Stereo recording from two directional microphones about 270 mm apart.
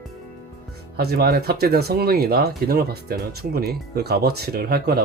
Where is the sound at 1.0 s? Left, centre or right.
Right.